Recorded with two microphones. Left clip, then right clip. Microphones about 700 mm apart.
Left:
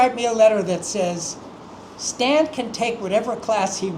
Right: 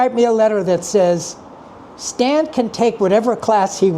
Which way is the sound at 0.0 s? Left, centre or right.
Right.